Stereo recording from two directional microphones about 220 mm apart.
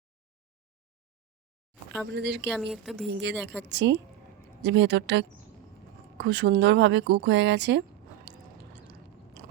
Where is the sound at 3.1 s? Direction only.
55° right (ahead or behind).